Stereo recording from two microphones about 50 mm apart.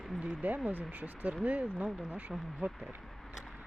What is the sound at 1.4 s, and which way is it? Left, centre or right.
Speech, right.